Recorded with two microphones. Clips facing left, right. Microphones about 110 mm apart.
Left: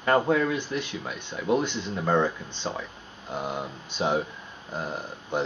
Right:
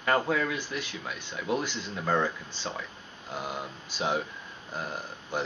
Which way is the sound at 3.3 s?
25° left (ahead or behind).